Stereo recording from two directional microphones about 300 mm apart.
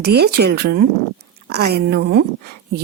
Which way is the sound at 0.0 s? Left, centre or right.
Right.